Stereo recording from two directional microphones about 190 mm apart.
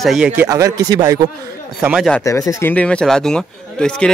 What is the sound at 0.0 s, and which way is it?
Speech, 5° right (ahead or behind).